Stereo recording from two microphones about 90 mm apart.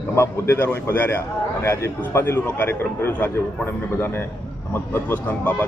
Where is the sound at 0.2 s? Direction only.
25° left (ahead or behind).